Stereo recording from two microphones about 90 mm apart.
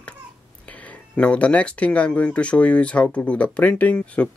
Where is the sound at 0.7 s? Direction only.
15° left (ahead or behind).